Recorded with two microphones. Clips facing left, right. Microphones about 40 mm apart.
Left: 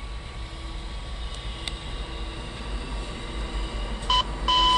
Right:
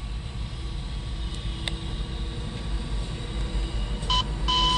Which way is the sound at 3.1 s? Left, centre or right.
Left.